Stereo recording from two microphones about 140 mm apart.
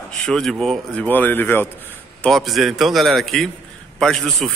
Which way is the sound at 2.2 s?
Centre (ahead or behind).